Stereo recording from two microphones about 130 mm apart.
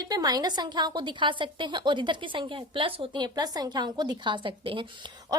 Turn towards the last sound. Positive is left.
turn(degrees=-40)  # may be behind; listen again after turning